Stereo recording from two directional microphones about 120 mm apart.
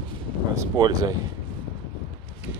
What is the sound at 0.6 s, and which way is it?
Speech, 35° right (ahead or behind).